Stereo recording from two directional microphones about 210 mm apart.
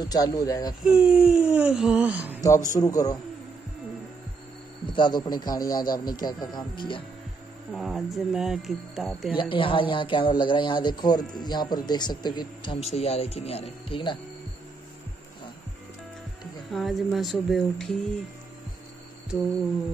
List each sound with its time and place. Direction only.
0.0 s speech: 20° left (ahead or behind)
0.8 s speech: 5° right (ahead or behind)
2.4 s speech: 15° left (ahead or behind)
4.9 s a man's voice: 20° left (ahead or behind)
7.7 s speech: centre (ahead or behind)
9.4 s a man's voice: 25° left (ahead or behind)
16.7 s speech: centre (ahead or behind)